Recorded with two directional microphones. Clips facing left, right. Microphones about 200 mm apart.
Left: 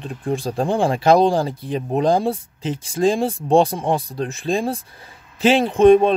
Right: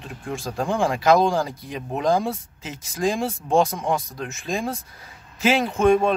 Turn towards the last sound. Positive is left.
turn(degrees=30)  # may be behind; listen again after turning